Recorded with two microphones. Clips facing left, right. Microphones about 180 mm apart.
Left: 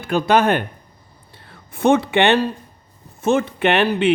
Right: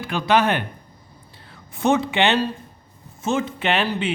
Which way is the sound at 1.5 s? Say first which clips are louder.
Left 4 dB; 55° left (ahead or behind).